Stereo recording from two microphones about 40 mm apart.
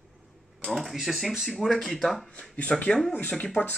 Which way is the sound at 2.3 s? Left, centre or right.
Left.